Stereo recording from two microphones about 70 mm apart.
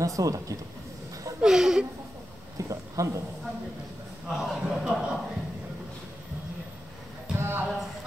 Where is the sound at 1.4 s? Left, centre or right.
Centre.